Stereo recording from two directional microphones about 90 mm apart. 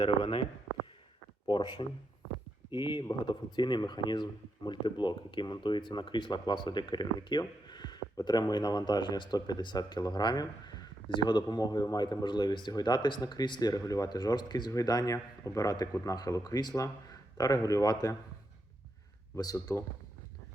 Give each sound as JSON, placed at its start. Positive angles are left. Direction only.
{"t": 0.0, "sound": "speech", "side_deg": 65}
{"t": 1.5, "sound": "a man's voice", "side_deg": 60}
{"t": 19.4, "sound": "a man's voice", "side_deg": 40}